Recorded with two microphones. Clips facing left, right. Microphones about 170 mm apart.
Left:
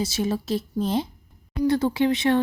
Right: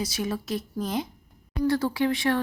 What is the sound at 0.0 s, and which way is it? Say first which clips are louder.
A woman's voice: left 4 dB; 25° left (ahead or behind).